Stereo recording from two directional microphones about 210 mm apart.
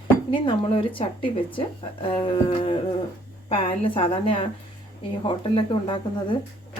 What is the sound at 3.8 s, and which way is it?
Speech, 25° left (ahead or behind).